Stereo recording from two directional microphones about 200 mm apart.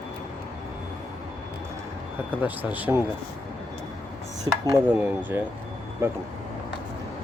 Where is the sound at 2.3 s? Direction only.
5° right (ahead or behind).